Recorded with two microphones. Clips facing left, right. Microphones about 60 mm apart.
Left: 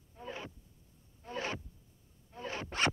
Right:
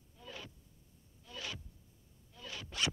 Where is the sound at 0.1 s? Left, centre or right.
Left.